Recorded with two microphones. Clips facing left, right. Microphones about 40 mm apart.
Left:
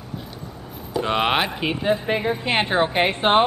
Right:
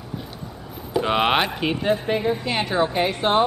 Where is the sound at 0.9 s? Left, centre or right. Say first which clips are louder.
Right 1 dB; centre.